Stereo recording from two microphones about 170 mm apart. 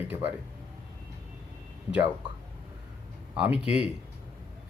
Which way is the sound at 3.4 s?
5° right (ahead or behind).